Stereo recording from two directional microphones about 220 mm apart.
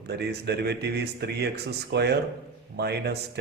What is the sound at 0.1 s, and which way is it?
Speech, 50° right (ahead or behind).